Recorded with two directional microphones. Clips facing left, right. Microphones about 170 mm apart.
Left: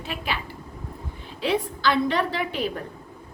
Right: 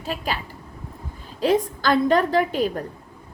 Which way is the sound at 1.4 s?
45° right (ahead or behind).